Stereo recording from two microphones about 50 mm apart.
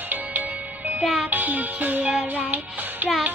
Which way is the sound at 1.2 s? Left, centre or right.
Right.